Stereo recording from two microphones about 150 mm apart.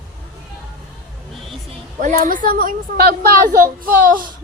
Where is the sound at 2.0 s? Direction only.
65° right (ahead or behind).